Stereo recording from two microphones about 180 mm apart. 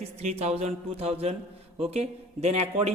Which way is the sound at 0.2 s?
40° right (ahead or behind).